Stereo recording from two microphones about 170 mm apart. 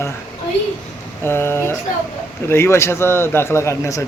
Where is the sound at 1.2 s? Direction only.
15° left (ahead or behind).